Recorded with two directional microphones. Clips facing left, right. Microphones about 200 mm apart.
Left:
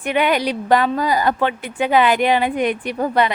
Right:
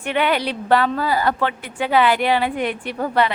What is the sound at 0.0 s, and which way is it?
A woman's voice, 15° left (ahead or behind).